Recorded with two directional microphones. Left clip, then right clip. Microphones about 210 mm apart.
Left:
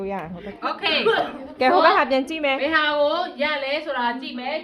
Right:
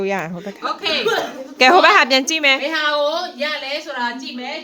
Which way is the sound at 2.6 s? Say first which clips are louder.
Right 1 dB; 30° left (ahead or behind).